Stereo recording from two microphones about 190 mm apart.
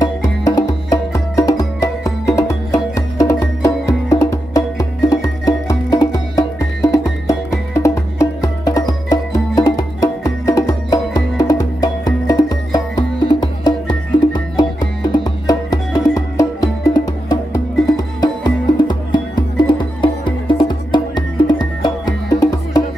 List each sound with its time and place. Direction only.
0.0 s music: 20° left (ahead or behind)